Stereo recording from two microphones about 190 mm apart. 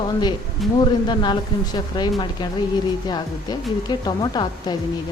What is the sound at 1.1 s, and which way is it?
A woman's voice, 25° left (ahead or behind).